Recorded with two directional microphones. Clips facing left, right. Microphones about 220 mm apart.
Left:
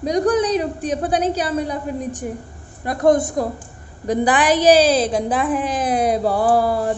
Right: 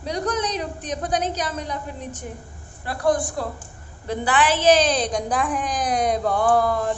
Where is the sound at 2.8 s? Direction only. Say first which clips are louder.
Left 6 dB; 20° left (ahead or behind).